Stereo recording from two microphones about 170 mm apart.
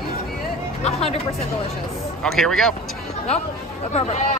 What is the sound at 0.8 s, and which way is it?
Speech, 35° left (ahead or behind).